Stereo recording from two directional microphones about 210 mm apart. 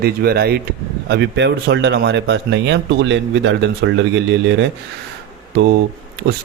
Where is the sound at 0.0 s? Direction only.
50° right (ahead or behind).